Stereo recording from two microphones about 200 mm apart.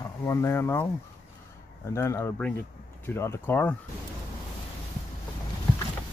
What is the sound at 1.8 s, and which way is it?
Speech, 15° left (ahead or behind).